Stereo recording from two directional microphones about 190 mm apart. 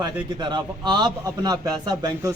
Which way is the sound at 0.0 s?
25° right (ahead or behind).